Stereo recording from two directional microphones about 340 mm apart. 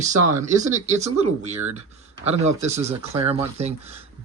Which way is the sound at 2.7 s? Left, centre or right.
Centre.